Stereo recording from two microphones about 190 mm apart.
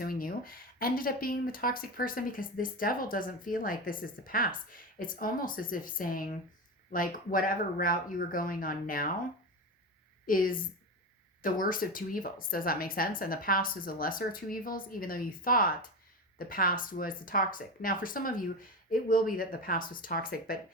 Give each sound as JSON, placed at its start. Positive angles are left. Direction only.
{"t": 0.0, "sound": "speech", "side_deg": 50}
{"t": 10.2, "sound": "speech", "side_deg": 45}